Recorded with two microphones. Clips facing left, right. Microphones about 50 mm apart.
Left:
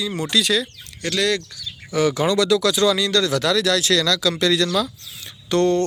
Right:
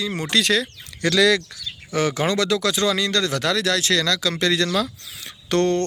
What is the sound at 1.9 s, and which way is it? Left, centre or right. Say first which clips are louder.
Speech: left 2 dB; right.